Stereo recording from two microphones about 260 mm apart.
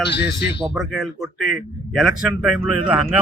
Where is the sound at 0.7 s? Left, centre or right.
Centre.